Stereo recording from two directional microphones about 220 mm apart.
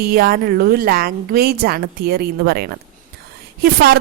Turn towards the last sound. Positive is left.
turn(degrees=-45)  # may be behind; listen again after turning